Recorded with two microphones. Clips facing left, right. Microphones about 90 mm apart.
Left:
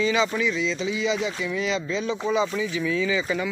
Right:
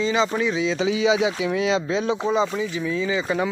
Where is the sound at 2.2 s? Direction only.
30° right (ahead or behind).